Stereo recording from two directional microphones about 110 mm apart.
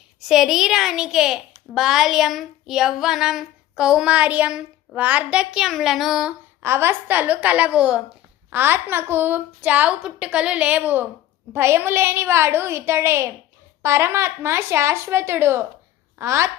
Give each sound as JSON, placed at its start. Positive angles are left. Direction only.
{"t": 0.2, "sound": "a child's voice", "side_deg": -5}
{"t": 6.6, "sound": "a woman's voice", "side_deg": -20}